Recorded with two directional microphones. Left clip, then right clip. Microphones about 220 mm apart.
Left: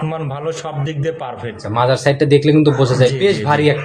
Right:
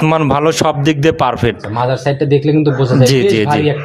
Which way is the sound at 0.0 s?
50° right (ahead or behind).